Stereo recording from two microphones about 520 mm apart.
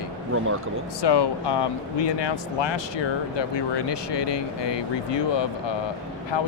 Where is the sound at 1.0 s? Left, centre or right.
Left.